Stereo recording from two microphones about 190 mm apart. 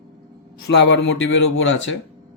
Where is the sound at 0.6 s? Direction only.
65° left (ahead or behind); by 1.9 s 85° left.